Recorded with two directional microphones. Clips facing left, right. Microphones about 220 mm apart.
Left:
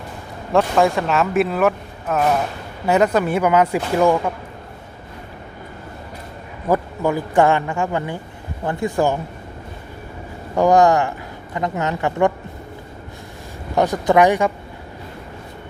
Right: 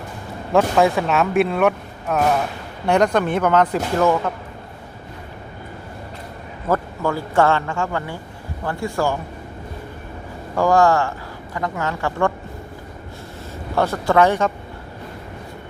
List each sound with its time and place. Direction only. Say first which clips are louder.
0.5 s speech: even; centre (ahead or behind)
6.7 s speech: left 2 dB; 15° left (ahead or behind)
10.5 s speech: left 2 dB; 20° left (ahead or behind)
13.7 s speech: left 2 dB; 15° left (ahead or behind)